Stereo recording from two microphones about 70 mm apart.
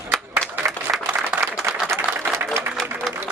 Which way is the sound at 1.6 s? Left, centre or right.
Right.